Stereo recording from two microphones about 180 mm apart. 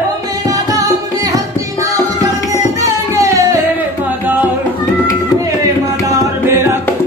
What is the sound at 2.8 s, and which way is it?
Music, 20° right (ahead or behind).